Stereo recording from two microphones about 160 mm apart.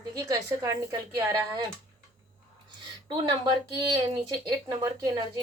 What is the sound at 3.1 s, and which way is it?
Speech, 30° right (ahead or behind).